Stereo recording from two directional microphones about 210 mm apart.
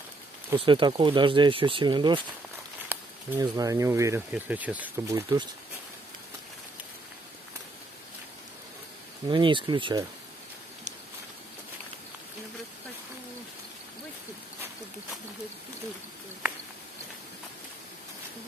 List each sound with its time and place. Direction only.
0.6 s speech: 25° right (ahead or behind)
9.3 s speech: 25° right (ahead or behind)